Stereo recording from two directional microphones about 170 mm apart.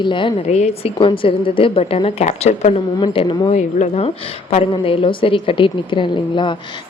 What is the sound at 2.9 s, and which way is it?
A woman's voice, 30° left (ahead or behind).